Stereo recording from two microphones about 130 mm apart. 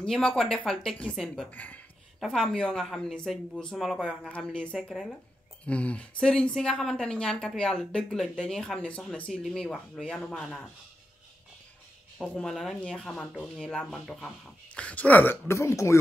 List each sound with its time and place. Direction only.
0.0 s a woman's voice: 5° left (ahead or behind)
1.5 s a woman's voice: 10° left (ahead or behind)
12.2 s a woman's voice: 5° left (ahead or behind); by 16.0 s 20° left (ahead or behind)